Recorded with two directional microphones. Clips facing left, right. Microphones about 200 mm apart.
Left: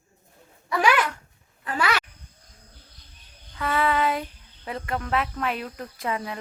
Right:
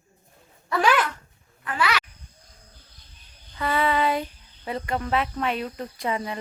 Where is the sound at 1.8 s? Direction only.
45° left (ahead or behind).